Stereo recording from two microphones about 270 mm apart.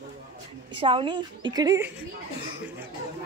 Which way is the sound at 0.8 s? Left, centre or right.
Centre.